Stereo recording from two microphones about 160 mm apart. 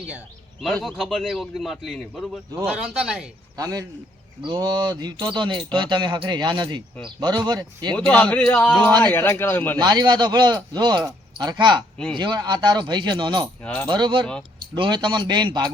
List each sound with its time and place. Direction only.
0.6 s a man's voice: 5° left (ahead or behind)
3.6 s speech: 25° right (ahead or behind)
7.9 s a man's voice: 10° left (ahead or behind)
9.7 s speech: 25° right (ahead or behind)